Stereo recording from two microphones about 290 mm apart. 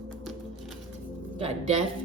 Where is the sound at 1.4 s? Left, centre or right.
Right.